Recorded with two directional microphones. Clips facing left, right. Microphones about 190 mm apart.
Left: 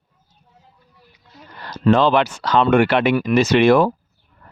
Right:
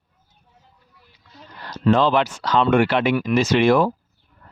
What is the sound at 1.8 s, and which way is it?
Speech, 70° left (ahead or behind).